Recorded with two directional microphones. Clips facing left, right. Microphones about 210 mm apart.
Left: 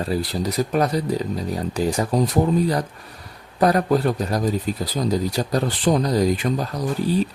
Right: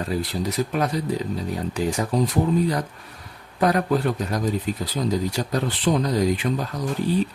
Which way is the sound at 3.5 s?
35° left (ahead or behind).